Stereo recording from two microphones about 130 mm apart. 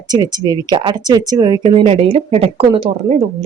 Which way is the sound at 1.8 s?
50° right (ahead or behind).